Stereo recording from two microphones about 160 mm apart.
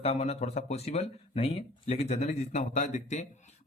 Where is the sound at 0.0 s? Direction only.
40° left (ahead or behind).